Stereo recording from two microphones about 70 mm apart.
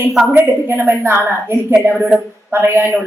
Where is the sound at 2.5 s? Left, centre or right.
Right.